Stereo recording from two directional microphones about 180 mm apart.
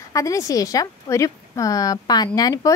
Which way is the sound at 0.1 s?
20° left (ahead or behind).